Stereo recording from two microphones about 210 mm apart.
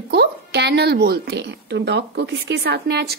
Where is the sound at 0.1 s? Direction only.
50° right (ahead or behind).